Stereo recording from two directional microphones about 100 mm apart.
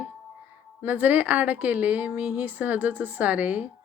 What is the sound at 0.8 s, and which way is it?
Speech, 15° right (ahead or behind).